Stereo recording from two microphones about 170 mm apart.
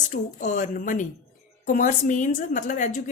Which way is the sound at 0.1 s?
45° left (ahead or behind).